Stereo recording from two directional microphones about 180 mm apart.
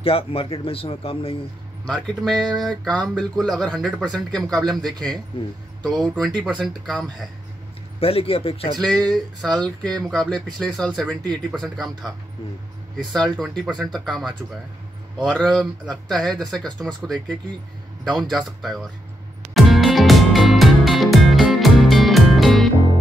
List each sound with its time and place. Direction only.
0.0 s a man's voice: 30° left (ahead or behind)
1.9 s speech: 5° left (ahead or behind)
5.8 s speech: 5° left (ahead or behind)
8.0 s a man's voice: 35° left (ahead or behind)
8.7 s speech: 5° left (ahead or behind)
12.9 s speech: 5° left (ahead or behind)
19.5 s music: centre (ahead or behind)